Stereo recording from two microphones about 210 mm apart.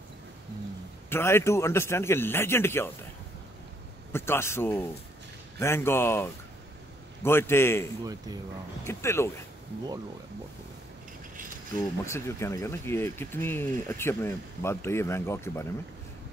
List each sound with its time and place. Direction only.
1.1 s speech: 10° left (ahead or behind)
4.1 s speech: 10° left (ahead or behind)
8.0 s speech: 20° right (ahead or behind)
8.8 s speech: 10° left (ahead or behind)
12.1 s speech: 15° left (ahead or behind)